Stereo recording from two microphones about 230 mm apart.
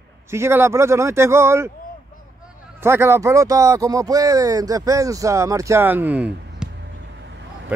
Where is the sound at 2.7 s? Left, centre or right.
Centre.